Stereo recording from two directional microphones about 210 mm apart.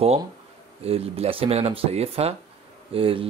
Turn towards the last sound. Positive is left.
turn(degrees=-25)  # may be behind; listen again after turning